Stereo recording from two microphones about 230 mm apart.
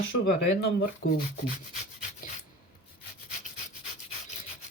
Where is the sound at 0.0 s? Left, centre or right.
Left.